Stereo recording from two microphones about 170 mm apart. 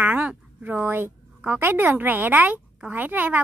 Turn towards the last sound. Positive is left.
turn(degrees=-10)  # may be behind; listen again after turning